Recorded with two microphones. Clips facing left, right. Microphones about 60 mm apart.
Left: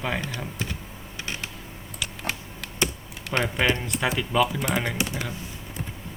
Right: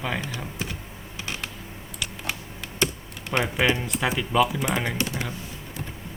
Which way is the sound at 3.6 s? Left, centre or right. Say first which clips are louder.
Right 1 dB; centre.